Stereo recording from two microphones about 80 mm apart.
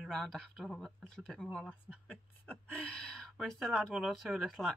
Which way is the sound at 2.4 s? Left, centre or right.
Centre.